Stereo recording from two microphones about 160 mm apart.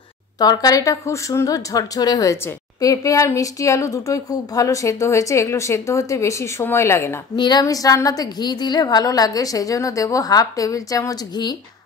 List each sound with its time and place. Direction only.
0.4 s a woman's voice: 25° left (ahead or behind)
7.3 s a woman's voice: 25° left (ahead or behind)